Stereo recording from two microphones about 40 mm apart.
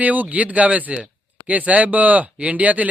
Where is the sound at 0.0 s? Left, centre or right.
Right.